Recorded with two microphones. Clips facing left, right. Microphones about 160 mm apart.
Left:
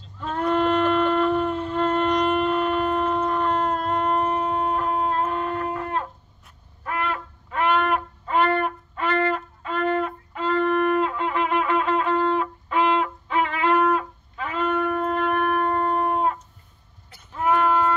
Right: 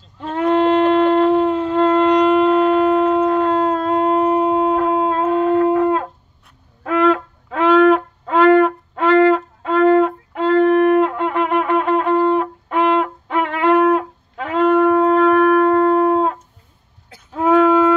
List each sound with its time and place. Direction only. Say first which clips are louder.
0.3 s shofar: right 6 dB; 85° right
4.7 s music: right 7 dB; 90° right
17.3 s a sound: right 8 dB; 90° right